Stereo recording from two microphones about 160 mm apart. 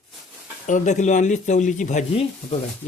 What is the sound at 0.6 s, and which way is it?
Speech, 50° left (ahead or behind).